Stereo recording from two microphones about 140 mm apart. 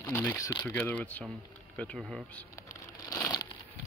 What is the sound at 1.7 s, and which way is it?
Speech, 10° left (ahead or behind).